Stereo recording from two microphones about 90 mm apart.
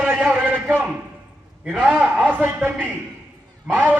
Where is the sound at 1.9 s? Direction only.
15° right (ahead or behind).